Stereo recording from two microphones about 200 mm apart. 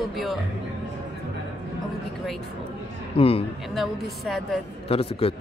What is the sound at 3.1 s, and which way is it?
Mantra, 30° left (ahead or behind).